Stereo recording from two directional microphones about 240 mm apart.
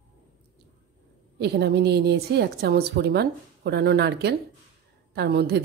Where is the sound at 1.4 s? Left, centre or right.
Right.